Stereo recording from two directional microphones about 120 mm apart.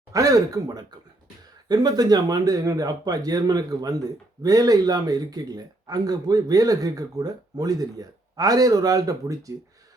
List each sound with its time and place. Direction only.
0.1 s speech: 30° right (ahead or behind)